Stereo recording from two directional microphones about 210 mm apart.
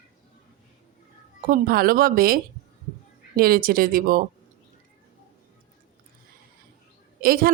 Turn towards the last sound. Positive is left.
turn(degrees=-45)  # may be behind; listen again after turning